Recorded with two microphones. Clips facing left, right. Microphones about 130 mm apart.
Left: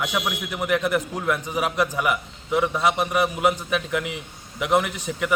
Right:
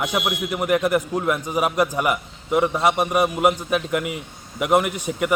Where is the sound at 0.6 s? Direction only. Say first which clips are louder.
Right 2 dB; 45° right (ahead or behind).